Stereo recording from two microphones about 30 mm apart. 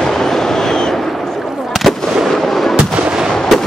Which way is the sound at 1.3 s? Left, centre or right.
Centre.